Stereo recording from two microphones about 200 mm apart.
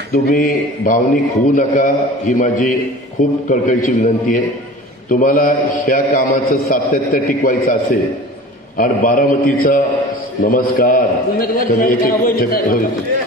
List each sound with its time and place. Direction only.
0.1 s a man's voice: 45° left (ahead or behind)